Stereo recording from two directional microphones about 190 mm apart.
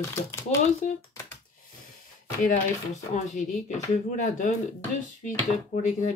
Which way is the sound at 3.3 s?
40° left (ahead or behind).